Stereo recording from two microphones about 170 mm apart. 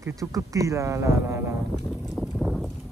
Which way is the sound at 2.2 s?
Centre (ahead or behind).